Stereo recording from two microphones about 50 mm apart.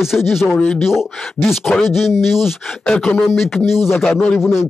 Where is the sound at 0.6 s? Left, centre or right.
Centre.